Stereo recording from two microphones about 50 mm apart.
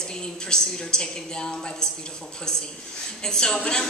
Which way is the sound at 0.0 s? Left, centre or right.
Centre.